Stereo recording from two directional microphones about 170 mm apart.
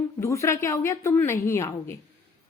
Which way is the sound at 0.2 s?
15° left (ahead or behind).